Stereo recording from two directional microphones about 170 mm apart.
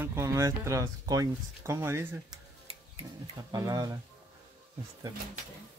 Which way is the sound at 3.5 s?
20° right (ahead or behind).